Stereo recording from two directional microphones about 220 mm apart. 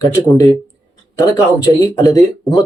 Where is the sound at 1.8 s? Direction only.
15° left (ahead or behind).